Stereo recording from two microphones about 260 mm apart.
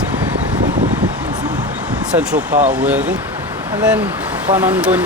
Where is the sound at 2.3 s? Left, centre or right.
Right.